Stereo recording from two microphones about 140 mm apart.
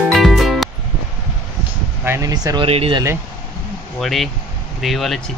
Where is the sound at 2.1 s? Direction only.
25° right (ahead or behind).